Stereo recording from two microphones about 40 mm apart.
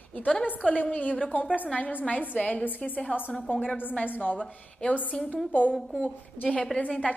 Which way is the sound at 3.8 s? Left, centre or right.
Left.